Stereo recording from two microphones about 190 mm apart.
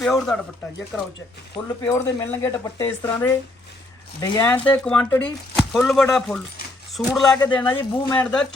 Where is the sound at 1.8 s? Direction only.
15° left (ahead or behind).